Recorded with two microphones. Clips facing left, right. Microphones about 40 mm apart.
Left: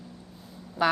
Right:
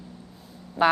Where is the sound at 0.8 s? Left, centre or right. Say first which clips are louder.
Right 4 dB; right.